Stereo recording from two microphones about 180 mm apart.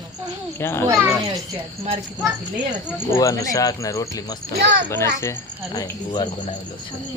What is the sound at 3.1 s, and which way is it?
Speech, 20° left (ahead or behind).